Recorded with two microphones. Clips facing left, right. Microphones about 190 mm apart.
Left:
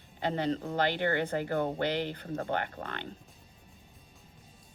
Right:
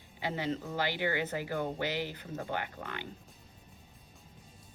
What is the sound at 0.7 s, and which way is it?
Speech, 55° left (ahead or behind).